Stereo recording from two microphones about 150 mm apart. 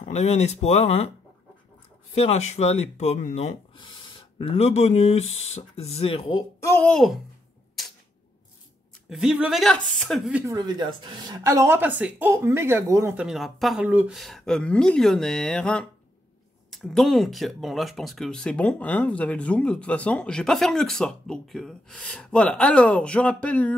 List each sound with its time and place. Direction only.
0.0 s speech: 50° left (ahead or behind)
2.1 s speech: 45° left (ahead or behind)
6.6 s speech: 15° left (ahead or behind)
6.9 s speech: centre (ahead or behind)
9.1 s speech: 5° right (ahead or behind)
10.4 s speech: 25° right (ahead or behind)
13.1 s speech: 5° right (ahead or behind)